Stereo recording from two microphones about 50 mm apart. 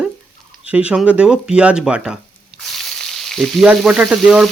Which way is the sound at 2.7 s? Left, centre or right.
Centre.